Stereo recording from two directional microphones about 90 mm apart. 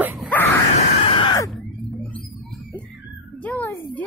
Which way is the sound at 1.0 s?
75° left (ahead or behind).